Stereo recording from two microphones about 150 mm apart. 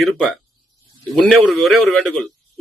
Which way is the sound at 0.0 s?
Centre (ahead or behind).